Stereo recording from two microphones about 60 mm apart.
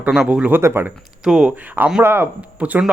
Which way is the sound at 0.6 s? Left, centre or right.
Right.